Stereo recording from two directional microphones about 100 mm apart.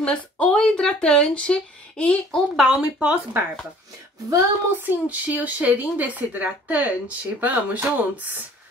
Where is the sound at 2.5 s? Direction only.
5° right (ahead or behind).